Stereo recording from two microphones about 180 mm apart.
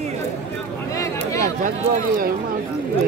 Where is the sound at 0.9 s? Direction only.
20° left (ahead or behind).